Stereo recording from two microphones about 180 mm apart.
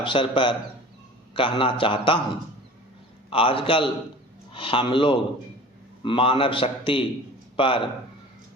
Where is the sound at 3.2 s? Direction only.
30° left (ahead or behind).